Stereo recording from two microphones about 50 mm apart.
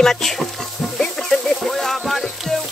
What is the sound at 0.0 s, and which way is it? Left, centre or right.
Speech, centre.